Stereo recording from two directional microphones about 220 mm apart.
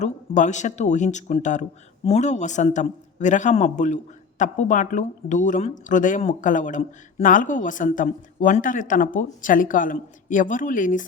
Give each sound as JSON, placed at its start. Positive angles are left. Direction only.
{"t": 0.0, "sound": "a man's voice", "side_deg": 35}